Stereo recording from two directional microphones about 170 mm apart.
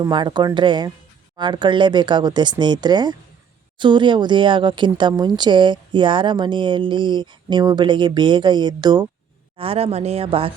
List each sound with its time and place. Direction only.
0.0 s speech: 25° right (ahead or behind)